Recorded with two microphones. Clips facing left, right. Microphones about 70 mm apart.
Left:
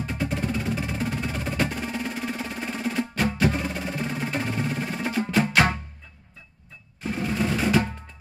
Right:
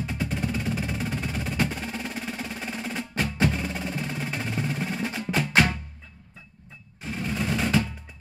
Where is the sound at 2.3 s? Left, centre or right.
Centre.